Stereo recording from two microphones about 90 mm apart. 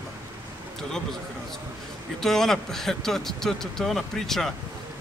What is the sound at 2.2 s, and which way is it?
Speech, 5° left (ahead or behind).